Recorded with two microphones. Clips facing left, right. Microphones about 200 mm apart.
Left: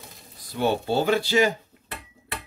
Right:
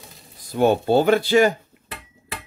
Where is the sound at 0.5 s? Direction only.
50° right (ahead or behind).